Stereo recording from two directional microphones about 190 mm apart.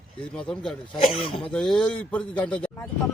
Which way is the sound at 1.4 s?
Centre (ahead or behind).